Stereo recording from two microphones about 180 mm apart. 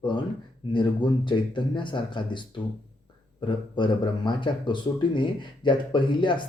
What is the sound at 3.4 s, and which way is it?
Speech, 25° left (ahead or behind).